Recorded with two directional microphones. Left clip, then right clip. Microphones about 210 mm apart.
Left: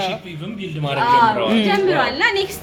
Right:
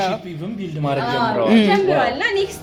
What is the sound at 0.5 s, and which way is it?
Speech, 40° right (ahead or behind).